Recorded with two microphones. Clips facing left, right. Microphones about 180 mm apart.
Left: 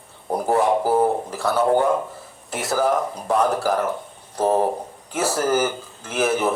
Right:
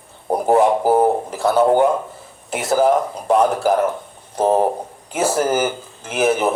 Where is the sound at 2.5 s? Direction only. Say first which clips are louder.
Right 5 dB; 20° right (ahead or behind).